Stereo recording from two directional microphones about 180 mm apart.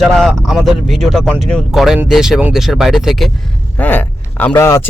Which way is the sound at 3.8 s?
10° left (ahead or behind).